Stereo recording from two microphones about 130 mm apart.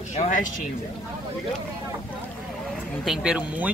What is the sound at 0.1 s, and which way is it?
Speech, 75° left (ahead or behind).